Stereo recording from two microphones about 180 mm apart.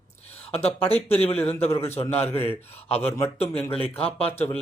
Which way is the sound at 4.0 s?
35° left (ahead or behind).